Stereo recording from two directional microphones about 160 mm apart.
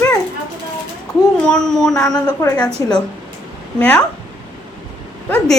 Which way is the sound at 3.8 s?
10° left (ahead or behind).